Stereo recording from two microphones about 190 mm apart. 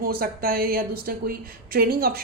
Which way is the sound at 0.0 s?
50° right (ahead or behind).